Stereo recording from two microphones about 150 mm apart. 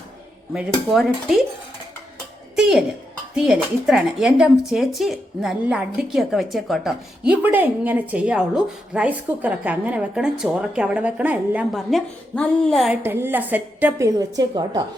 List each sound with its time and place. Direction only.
0.5 s a woman's voice: 5° right (ahead or behind)
2.6 s a sound: 5° right (ahead or behind)
3.3 s a woman's voice: 5° right (ahead or behind)
7.4 s a woman's voice: 10° right (ahead or behind)
11.7 s a woman's voice: centre (ahead or behind)
12.9 s a woman's voice: 15° right (ahead or behind)
14.2 s a woman's voice: 25° right (ahead or behind)